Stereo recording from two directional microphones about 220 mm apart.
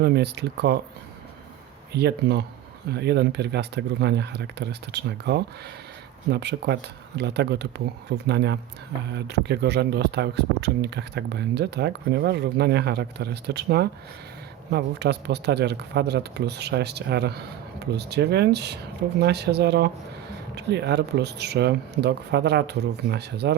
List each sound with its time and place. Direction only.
0.0 s speech: 50° right (ahead or behind)
1.9 s speech: 50° right (ahead or behind)